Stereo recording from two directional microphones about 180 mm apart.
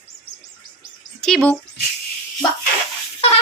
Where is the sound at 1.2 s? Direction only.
5° left (ahead or behind).